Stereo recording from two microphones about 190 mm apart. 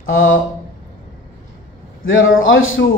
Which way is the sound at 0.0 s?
90° left.